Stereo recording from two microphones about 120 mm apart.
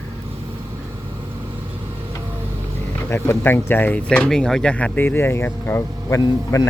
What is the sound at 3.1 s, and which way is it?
Speech, 20° left (ahead or behind).